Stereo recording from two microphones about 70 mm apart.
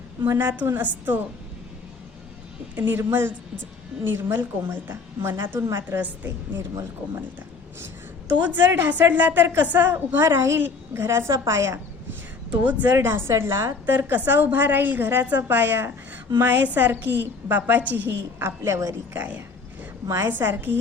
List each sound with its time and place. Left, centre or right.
0.2 s a woman's voice: right
2.7 s a woman's voice: right
6.0 s a woman's voice: right
8.4 s a woman's voice: right
12.5 s a woman's voice: right
13.8 s a woman's voice: right
19.1 s a woman's voice: right